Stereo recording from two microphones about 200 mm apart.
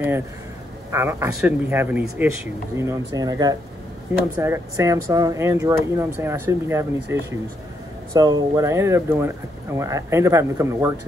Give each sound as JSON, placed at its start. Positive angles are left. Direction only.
{"t": 0.9, "sound": "speech", "side_deg": -10}